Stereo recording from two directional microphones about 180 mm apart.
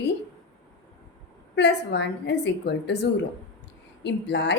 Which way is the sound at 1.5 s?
75° left (ahead or behind).